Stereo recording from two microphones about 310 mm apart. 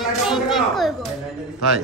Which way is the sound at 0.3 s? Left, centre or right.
Centre.